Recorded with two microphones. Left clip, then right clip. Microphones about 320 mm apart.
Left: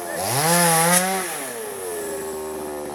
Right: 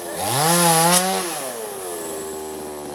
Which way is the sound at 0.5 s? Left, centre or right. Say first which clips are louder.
Right 1 dB; centre.